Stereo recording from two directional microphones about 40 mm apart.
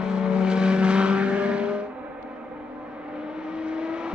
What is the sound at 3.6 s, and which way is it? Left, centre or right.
Vehicle, right.